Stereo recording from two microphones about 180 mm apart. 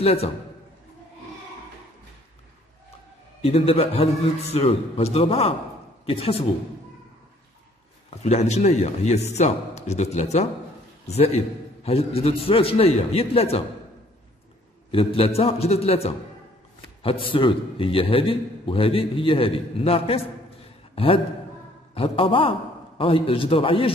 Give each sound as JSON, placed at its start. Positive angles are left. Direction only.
{"t": 0.0, "sound": "a man's voice", "side_deg": 35}
{"t": 3.4, "sound": "a man's voice", "side_deg": 35}
{"t": 8.2, "sound": "a man's voice", "side_deg": 35}
{"t": 14.9, "sound": "a man's voice", "side_deg": 30}